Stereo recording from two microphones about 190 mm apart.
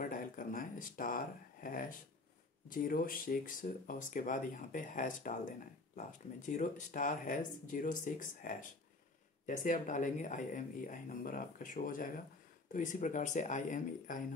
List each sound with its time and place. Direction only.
0.0 s speech: 45° left (ahead or behind)